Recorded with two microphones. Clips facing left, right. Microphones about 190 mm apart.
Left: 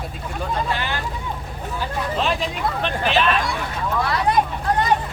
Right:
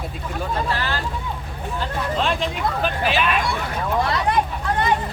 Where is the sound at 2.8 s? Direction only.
5° right (ahead or behind).